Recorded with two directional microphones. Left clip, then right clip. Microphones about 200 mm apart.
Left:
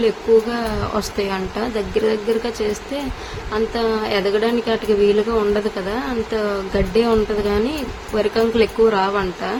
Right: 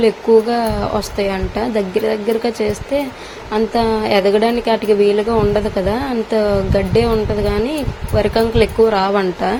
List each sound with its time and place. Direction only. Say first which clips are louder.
0.0 s a woman's voice: right 3 dB; 20° right (ahead or behind)